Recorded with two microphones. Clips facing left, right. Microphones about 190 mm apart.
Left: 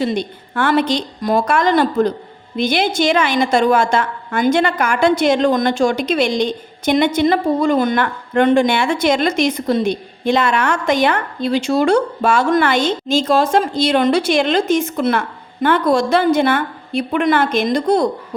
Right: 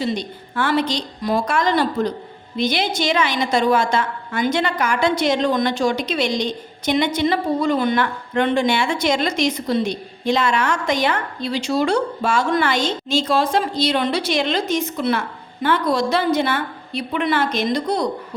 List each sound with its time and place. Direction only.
0.0 s a woman's voice: 55° left (ahead or behind)